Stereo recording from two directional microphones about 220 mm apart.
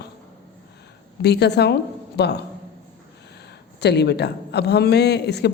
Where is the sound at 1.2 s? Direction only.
50° left (ahead or behind).